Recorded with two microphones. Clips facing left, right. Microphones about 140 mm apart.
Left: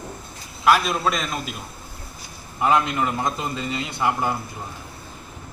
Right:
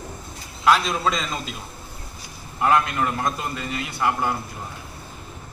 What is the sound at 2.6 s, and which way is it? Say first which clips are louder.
A man's voice: even; 15° left (ahead or behind).